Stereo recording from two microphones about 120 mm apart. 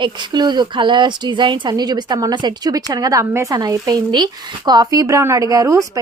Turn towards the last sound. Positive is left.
turn(degrees=-30)  # may be behind; listen again after turning